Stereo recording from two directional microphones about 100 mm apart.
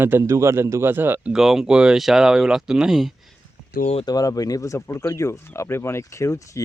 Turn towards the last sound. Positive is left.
turn(degrees=30)  # may be behind; listen again after turning